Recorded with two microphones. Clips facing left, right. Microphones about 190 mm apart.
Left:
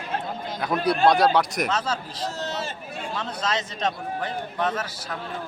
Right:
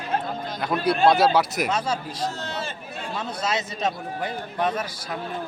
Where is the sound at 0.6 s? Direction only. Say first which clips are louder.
Even; centre (ahead or behind).